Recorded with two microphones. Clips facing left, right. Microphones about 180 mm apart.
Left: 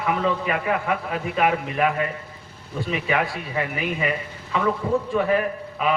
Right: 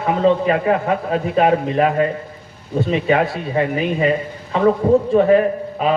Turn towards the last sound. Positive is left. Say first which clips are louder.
# right 6 dB
turn(degrees=-30)  # may be behind; listen again after turning